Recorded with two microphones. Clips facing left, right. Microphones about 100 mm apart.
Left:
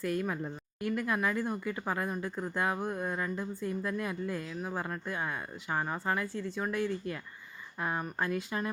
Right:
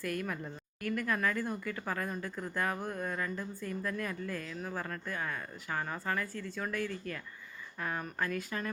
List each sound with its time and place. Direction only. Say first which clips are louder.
0.0 s speech: left 4 dB; 20° left (ahead or behind)